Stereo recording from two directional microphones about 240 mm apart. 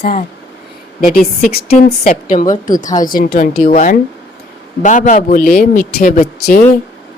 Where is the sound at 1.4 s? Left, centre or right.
Left.